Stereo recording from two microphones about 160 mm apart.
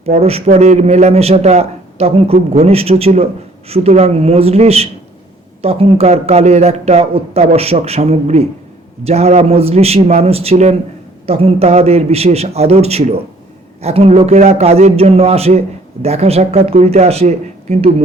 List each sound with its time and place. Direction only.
0.0 s a man's voice: 40° right (ahead or behind)